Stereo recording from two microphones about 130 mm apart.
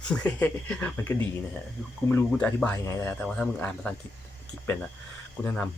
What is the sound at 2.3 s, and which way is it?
Speech, 10° left (ahead or behind).